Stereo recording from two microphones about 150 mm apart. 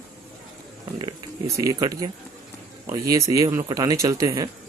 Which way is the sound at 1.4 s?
25° right (ahead or behind).